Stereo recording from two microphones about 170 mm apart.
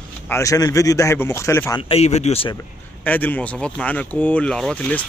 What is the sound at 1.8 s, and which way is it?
Speech, 35° left (ahead or behind).